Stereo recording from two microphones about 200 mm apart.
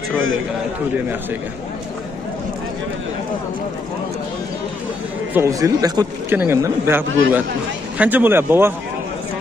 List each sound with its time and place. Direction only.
0.1 s a man's voice: 80° right
5.3 s speech: 15° right (ahead or behind)